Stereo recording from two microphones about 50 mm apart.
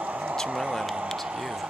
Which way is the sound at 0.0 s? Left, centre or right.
Right.